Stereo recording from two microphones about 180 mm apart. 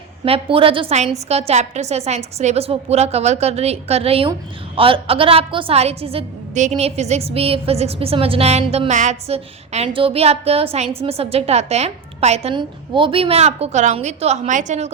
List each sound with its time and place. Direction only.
0.3 s a woman's voice: 30° right (ahead or behind)